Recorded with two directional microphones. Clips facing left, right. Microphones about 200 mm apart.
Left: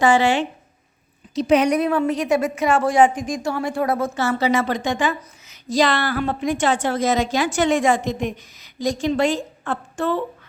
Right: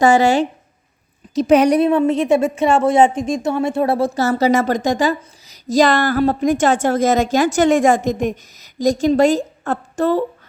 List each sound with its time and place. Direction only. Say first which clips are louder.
0.0 s a woman's voice: right 4 dB; 40° right (ahead or behind)